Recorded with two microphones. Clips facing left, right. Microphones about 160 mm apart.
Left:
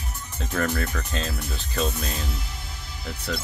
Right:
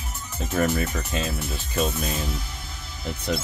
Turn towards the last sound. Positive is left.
turn(degrees=-20)  # may be behind; listen again after turning